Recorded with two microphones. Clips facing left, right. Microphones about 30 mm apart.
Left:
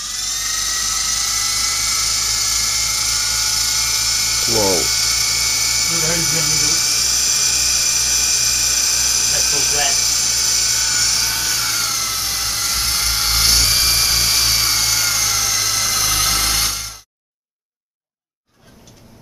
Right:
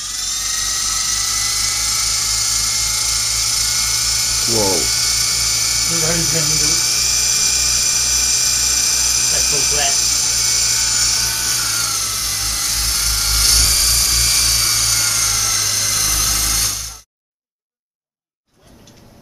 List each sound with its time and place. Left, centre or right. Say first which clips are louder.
0.5 s dental drill: even; centre